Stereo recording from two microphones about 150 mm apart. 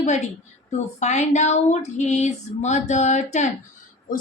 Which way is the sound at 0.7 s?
50° left (ahead or behind).